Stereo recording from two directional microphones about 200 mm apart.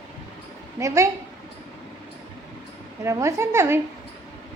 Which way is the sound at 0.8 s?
15° right (ahead or behind).